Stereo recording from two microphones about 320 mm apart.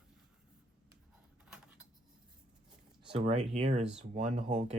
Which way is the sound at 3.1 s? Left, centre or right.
Centre.